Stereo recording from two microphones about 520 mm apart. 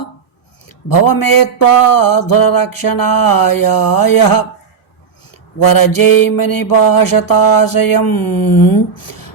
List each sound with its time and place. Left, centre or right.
0.9 s mantra: left
5.6 s mantra: left